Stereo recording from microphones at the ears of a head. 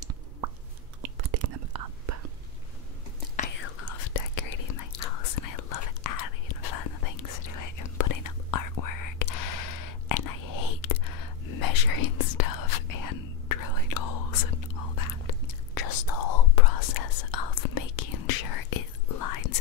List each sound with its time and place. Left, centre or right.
1.0 s whispering: right
3.3 s whispering: left